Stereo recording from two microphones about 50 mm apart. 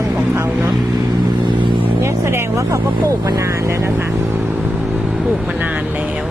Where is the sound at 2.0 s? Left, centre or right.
Right.